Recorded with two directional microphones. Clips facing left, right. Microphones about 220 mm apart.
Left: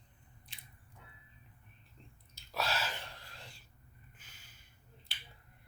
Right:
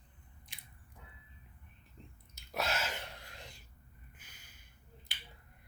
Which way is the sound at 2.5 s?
20° right (ahead or behind).